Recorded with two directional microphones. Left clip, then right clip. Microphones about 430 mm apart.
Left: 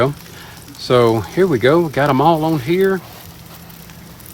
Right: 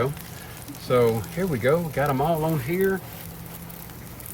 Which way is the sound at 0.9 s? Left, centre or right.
Centre.